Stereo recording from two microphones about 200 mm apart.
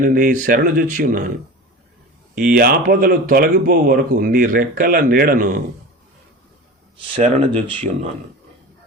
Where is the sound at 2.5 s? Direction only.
50° right (ahead or behind).